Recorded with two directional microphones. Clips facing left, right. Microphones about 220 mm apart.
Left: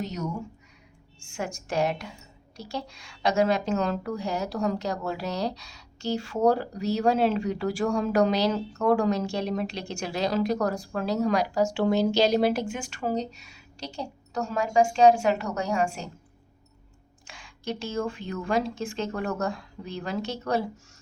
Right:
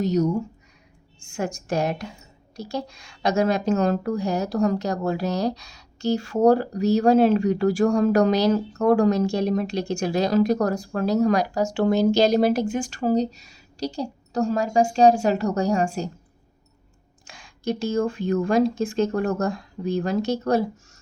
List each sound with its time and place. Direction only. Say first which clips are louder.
0.0 s a woman's voice: right 10 dB; 35° right (ahead or behind)
17.2 s a woman's voice: right 6 dB; 40° right (ahead or behind)